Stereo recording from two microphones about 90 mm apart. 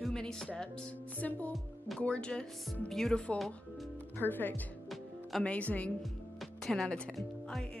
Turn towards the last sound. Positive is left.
turn(degrees=5)  # may be behind; listen again after turning